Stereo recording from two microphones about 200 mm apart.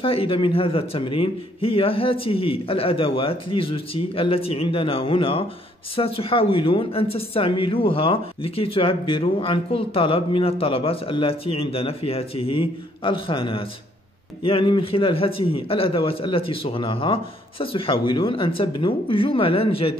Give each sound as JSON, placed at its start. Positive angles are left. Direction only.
{"t": 0.0, "sound": "speech", "side_deg": 25}